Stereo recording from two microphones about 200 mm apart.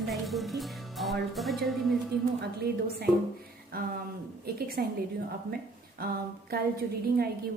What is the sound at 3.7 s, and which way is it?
A woman's voice, 50° right (ahead or behind).